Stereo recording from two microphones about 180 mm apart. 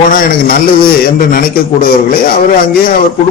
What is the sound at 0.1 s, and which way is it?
A man's voice, 55° left (ahead or behind).